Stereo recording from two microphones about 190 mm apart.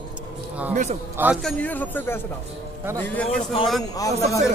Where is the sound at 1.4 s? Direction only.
10° left (ahead or behind).